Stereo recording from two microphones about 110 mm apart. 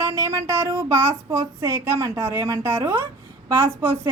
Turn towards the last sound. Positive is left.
turn(degrees=-25)  # may be behind; listen again after turning